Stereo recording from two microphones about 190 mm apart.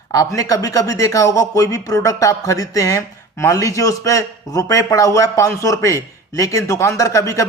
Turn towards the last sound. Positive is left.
turn(degrees=15)  # may be behind; listen again after turning